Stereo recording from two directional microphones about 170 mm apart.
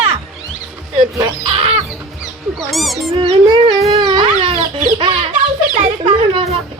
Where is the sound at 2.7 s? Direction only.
Centre (ahead or behind).